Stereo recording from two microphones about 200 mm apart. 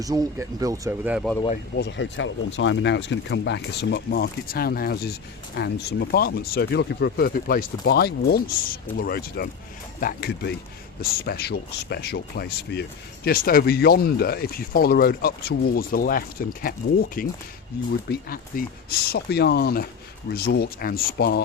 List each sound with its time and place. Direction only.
0.0 s speech: 20° right (ahead or behind)
1.7 s speech: 60° left (ahead or behind)